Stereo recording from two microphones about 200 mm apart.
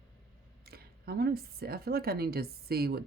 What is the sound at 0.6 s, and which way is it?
Speech, 50° right (ahead or behind).